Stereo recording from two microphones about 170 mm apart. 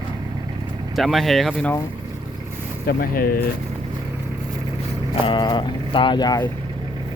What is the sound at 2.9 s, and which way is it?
Speech, 60° left (ahead or behind).